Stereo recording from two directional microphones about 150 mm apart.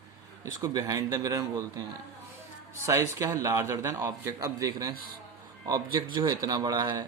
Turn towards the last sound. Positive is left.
turn(degrees=-25)  # may be behind; listen again after turning